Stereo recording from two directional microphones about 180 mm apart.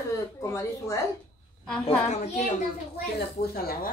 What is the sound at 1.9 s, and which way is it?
Speech, 40° left (ahead or behind).